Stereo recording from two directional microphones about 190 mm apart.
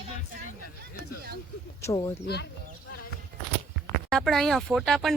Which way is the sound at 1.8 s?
20° left (ahead or behind).